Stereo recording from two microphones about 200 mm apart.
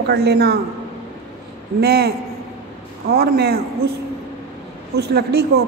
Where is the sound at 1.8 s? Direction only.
55° right (ahead or behind).